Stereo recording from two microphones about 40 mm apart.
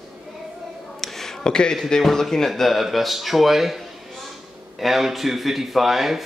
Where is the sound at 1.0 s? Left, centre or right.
Centre.